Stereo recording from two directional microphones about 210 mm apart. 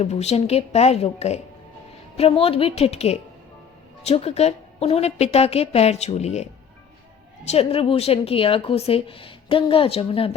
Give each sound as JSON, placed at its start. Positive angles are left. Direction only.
{"t": 0.0, "sound": "a woman's voice", "side_deg": 30}